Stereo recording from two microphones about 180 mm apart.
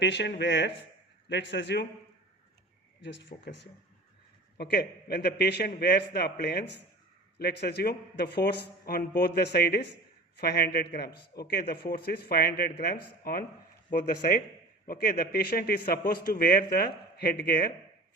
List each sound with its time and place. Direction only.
0.0 s speech: 75° left (ahead or behind)
3.4 s speech: 75° left (ahead or behind)
4.5 s a man's voice: 60° left (ahead or behind)
14.8 s a man's voice: 55° left (ahead or behind)